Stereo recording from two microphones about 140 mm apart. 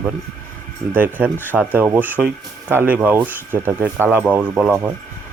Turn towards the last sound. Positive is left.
turn(degrees=-10)  # may be behind; listen again after turning